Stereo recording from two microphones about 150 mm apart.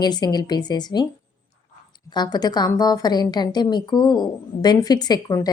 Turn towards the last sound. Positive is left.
turn(degrees=25)  # may be behind; listen again after turning